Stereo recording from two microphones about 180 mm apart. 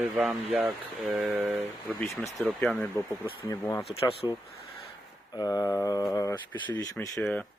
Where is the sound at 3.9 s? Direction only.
30° left (ahead or behind).